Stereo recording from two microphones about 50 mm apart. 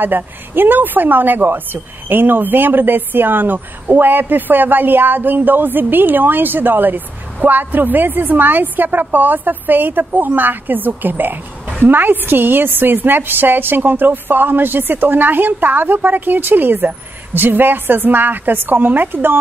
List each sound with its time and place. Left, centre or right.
0.0 s a woman's voice: right